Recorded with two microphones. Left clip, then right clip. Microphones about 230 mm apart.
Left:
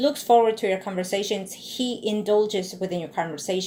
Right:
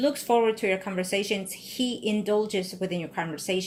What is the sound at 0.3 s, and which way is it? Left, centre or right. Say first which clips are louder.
Speech: left 6 dB; right.